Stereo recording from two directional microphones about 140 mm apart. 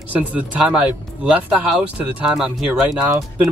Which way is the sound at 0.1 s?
10° right (ahead or behind).